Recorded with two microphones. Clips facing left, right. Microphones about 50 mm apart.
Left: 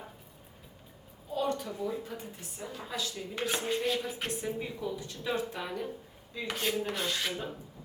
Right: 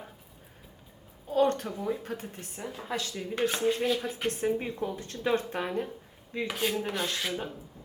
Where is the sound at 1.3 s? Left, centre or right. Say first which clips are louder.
Right 6 dB; right.